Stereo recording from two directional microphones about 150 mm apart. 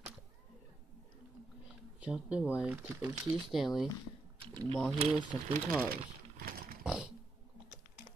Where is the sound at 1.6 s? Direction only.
5° right (ahead or behind).